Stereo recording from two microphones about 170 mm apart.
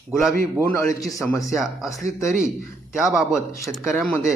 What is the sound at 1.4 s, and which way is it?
Speech, centre (ahead or behind).